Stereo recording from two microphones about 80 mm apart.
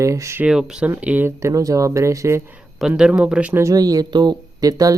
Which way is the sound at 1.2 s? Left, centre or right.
Right.